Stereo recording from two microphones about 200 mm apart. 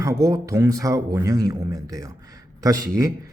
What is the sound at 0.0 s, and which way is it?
Speech, 15° right (ahead or behind).